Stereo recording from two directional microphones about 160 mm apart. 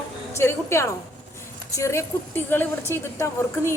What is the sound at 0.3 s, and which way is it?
A woman's voice, 15° left (ahead or behind).